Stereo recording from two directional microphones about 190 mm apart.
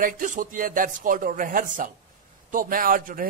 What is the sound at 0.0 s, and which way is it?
Speech, 45° right (ahead or behind).